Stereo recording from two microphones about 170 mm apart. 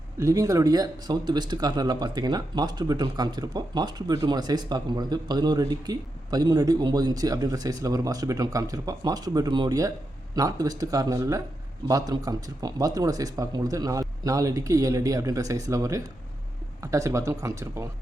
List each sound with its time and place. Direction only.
0.2 s speech: 20° right (ahead or behind)